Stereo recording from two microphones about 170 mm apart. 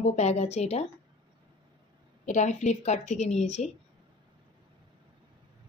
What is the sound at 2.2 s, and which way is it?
A woman's voice, 45° left (ahead or behind).